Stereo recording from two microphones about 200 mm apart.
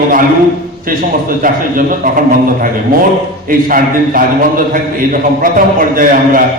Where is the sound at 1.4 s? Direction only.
45° right (ahead or behind).